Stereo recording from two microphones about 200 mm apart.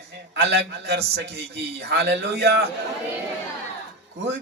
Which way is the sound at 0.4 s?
55° right (ahead or behind).